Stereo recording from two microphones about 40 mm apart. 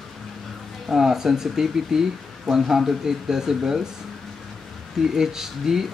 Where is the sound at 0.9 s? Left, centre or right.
Centre.